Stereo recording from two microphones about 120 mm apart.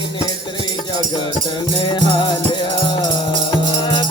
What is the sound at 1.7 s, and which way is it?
Music, 45° left (ahead or behind).